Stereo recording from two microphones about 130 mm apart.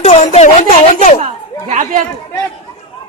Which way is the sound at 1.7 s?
75° right (ahead or behind).